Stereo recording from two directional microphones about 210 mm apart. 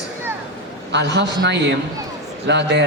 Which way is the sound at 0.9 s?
55° right (ahead or behind).